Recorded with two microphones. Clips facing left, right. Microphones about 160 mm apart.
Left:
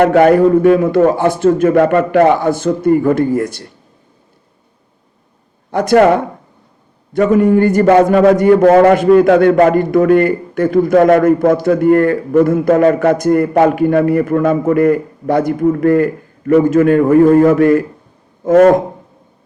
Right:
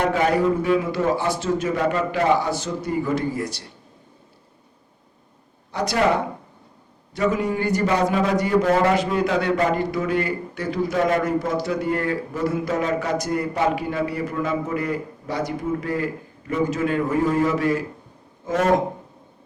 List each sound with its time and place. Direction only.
0.0 s a man's voice: 60° left (ahead or behind)
5.7 s a man's voice: 50° left (ahead or behind)